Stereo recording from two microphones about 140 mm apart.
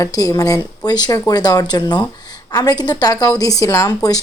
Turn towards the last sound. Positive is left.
turn(degrees=25)  # may be behind; listen again after turning